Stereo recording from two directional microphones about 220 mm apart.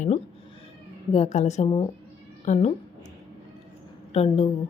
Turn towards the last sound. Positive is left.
turn(degrees=30)  # may be behind; listen again after turning